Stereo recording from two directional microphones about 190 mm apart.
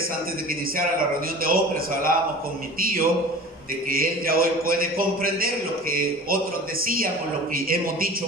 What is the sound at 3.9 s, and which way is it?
A man's voice, 50° right (ahead or behind).